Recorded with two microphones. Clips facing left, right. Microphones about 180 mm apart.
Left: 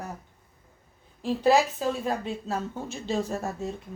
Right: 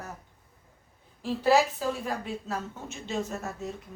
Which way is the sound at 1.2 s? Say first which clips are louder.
Left 1 dB; 20° left (ahead or behind).